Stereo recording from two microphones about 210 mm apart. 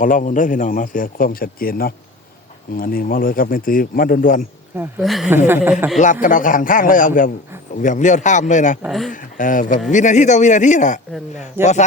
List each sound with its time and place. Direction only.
0.0 s a man's voice: 40° left (ahead or behind)
4.8 s speech: centre (ahead or behind)
6.0 s speech: 40° left (ahead or behind)
8.8 s speech: centre (ahead or behind)
9.1 s speech: 40° left (ahead or behind)